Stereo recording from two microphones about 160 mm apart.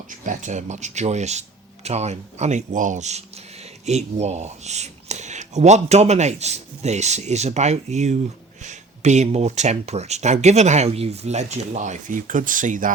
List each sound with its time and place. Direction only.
0.1 s speech: 50° right (ahead or behind)